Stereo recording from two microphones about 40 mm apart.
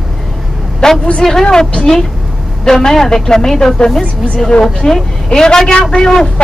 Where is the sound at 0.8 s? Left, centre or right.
Centre.